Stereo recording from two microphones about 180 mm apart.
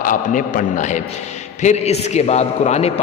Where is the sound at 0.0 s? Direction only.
50° left (ahead or behind).